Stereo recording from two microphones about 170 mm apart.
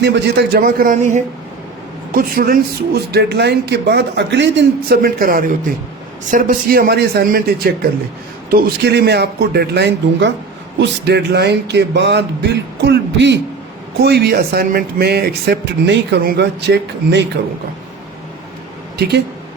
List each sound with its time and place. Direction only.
0.0 s speech: 80° right; by 1.0 s 55° right (ahead or behind)
2.1 s speech: 60° right (ahead or behind); by 13.4 s 90° right
14.0 s speech: 70° right (ahead or behind); by 17.2 s 90° right
18.9 s speech: 70° right (ahead or behind)